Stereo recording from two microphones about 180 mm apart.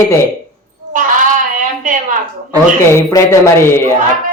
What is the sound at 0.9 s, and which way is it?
A woman's voice, 45° right (ahead or behind).